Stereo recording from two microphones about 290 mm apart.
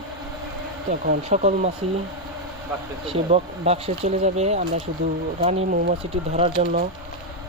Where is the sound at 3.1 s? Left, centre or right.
Right.